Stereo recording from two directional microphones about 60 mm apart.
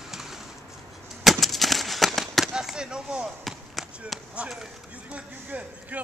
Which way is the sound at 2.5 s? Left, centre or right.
Centre.